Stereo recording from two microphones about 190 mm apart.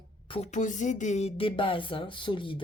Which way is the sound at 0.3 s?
30° left (ahead or behind).